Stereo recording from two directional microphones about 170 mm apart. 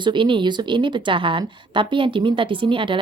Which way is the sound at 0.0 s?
30° right (ahead or behind).